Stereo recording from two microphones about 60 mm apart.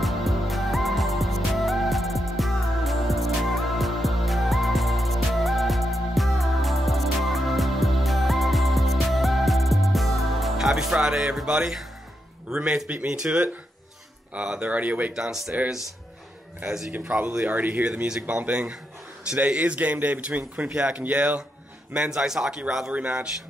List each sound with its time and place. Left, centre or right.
0.0 s music: centre
12.4 s a man's voice: centre
15.1 s a man's voice: centre
16.6 s a man's voice: centre
16.9 s a man's voice: right
17.5 s a man's voice: right
17.8 s a man's voice: centre
22.9 s a man's voice: right